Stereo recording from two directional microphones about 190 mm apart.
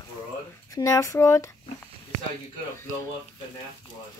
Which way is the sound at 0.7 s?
15° left (ahead or behind).